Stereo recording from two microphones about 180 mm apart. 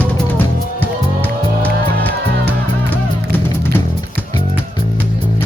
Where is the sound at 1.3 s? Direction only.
60° right (ahead or behind).